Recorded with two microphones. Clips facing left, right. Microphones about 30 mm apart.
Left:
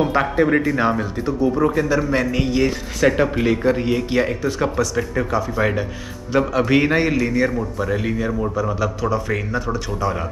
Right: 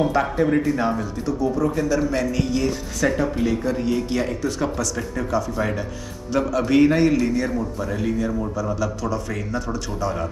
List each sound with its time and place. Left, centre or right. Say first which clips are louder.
0.0 s a man's voice: left 2 dB; left